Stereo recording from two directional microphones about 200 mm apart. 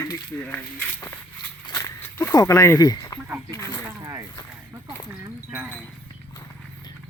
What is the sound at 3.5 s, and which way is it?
Snake, 15° left (ahead or behind).